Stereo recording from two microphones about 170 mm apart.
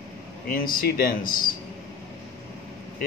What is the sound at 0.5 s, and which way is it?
Speech, 55° left (ahead or behind).